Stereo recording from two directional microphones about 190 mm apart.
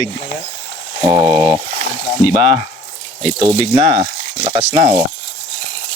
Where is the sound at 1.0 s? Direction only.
20° right (ahead or behind).